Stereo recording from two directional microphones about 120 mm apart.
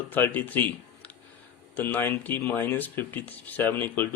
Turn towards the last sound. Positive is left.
turn(degrees=15)  # may be behind; listen again after turning